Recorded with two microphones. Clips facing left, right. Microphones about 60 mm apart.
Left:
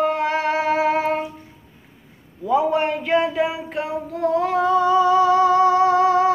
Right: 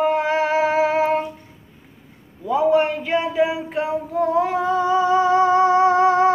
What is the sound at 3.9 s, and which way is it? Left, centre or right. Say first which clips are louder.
Music: even; centre.